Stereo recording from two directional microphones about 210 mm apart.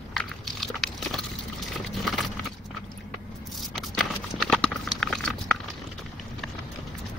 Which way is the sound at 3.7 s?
Centre (ahead or behind).